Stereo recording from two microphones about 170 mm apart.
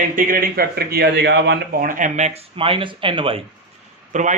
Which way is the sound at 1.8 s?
50° right (ahead or behind).